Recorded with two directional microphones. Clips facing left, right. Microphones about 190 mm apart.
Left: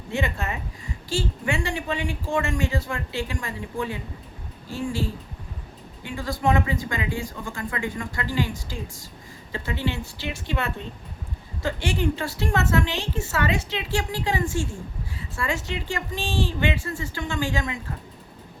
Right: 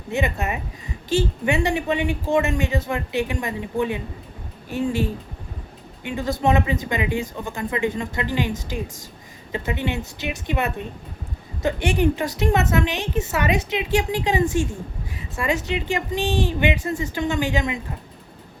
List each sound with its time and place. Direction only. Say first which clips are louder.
0.1 s a woman's voice: right 4 dB; 20° right (ahead or behind)